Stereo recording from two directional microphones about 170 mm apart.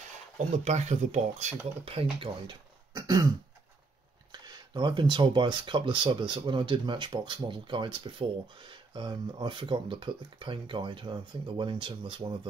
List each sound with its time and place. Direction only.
0.5 s speech: 40° right (ahead or behind)
1.9 s speech: 30° right (ahead or behind)
4.3 s speech: 25° right (ahead or behind)